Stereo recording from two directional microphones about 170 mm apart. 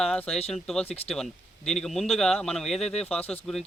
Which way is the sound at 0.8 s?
35° left (ahead or behind).